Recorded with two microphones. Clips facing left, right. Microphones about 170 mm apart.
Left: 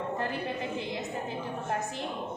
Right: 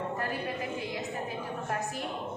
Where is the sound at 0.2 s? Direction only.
25° left (ahead or behind).